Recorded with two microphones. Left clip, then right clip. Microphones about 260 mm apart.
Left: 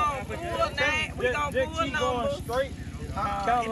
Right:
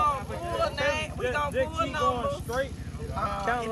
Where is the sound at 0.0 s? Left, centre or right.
Centre.